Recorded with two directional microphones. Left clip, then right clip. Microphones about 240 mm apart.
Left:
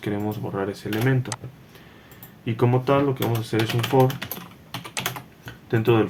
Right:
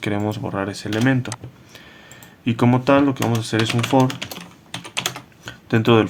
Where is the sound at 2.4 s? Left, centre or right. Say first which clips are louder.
Right 4 dB; right.